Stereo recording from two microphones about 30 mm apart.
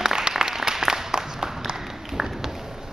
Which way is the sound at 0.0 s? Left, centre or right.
Right.